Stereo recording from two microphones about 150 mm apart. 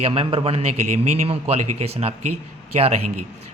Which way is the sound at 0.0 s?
40° right (ahead or behind).